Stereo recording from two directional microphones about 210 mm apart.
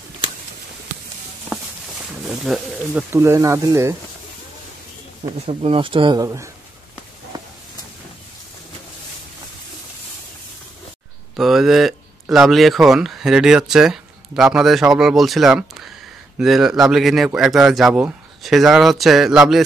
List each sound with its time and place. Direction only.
1.5 s walk: 5° right (ahead or behind)
2.2 s speech: 5° right (ahead or behind)
5.5 s speech: 25° right (ahead or behind)
11.3 s speech: centre (ahead or behind)